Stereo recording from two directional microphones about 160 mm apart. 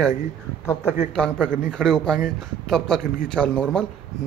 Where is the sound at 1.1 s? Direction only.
5° left (ahead or behind).